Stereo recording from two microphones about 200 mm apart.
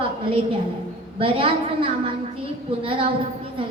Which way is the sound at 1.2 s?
25° right (ahead or behind).